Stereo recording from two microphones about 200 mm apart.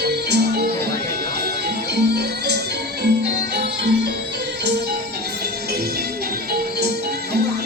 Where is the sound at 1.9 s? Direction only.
55° right (ahead or behind).